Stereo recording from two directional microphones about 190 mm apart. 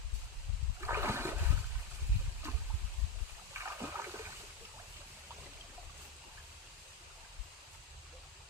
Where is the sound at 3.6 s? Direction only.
10° right (ahead or behind).